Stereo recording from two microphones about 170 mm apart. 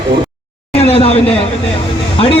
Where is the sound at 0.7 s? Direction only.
35° left (ahead or behind).